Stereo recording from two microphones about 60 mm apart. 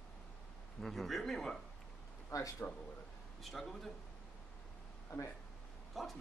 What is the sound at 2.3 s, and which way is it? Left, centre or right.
Speech, left.